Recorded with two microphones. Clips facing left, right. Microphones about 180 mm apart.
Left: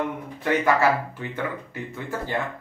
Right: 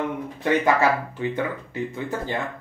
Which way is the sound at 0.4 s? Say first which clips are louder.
Right 1 dB; 20° right (ahead or behind).